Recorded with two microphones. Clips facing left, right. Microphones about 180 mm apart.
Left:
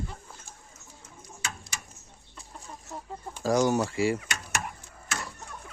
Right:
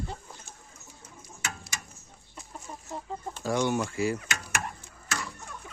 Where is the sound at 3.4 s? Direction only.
40° left (ahead or behind).